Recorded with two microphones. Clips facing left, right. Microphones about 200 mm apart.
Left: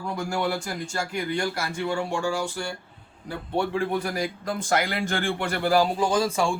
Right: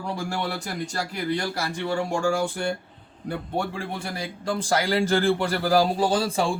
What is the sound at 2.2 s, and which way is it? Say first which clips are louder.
Speech: right 4 dB; 55° right (ahead or behind).